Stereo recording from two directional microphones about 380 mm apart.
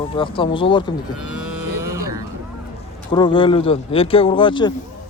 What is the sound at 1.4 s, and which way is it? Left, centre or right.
Cattle, right.